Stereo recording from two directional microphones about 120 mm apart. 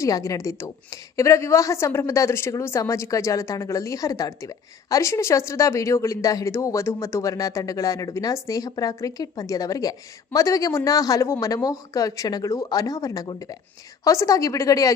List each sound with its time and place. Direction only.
0.0 s a woman's voice: 25° left (ahead or behind)